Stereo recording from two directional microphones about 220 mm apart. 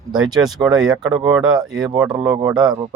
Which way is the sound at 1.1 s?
20° right (ahead or behind).